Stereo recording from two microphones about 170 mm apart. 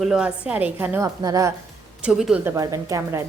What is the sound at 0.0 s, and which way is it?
A woman's voice, 5° right (ahead or behind).